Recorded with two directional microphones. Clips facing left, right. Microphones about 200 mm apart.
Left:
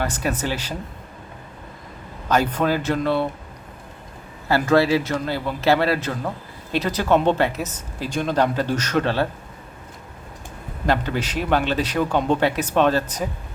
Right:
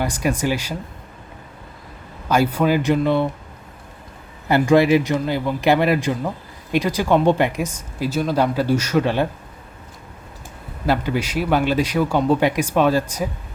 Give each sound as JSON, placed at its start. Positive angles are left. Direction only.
{"t": 0.0, "sound": "a man's voice", "side_deg": -10}
{"t": 2.3, "sound": "a man's voice", "side_deg": -10}
{"t": 4.4, "sound": "a man's voice", "side_deg": -15}
{"t": 10.8, "sound": "a man's voice", "side_deg": -10}